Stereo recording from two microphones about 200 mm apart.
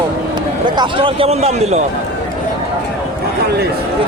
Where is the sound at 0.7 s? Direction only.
25° right (ahead or behind).